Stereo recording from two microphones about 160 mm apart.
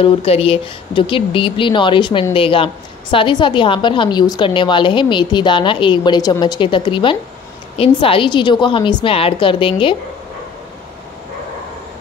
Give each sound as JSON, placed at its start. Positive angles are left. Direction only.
{"t": 0.0, "sound": "a woman's voice", "side_deg": 35}